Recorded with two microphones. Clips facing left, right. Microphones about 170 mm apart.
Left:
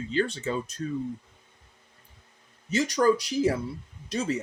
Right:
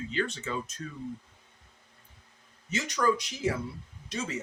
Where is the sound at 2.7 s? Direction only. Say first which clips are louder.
Left 5 dB; 35° left (ahead or behind).